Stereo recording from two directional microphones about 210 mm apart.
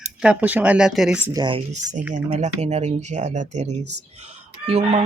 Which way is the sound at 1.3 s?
20° right (ahead or behind).